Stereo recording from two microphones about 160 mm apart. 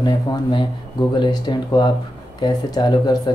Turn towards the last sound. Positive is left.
turn(degrees=25)  # may be behind; listen again after turning